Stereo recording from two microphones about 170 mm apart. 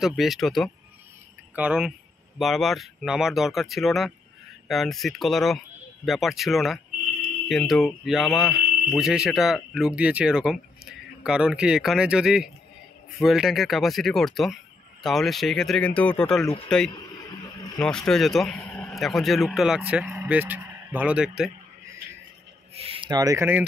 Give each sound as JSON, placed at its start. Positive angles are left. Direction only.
{"t": 0.0, "sound": "speech", "side_deg": 0}
{"t": 22.8, "sound": "speech", "side_deg": -30}